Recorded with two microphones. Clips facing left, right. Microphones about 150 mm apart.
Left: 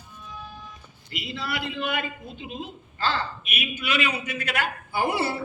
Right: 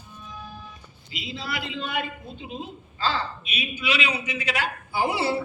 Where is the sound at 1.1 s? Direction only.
70° left (ahead or behind).